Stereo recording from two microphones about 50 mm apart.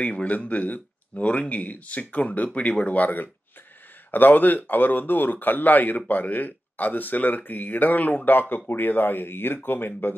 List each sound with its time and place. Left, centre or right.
0.0 s speech: left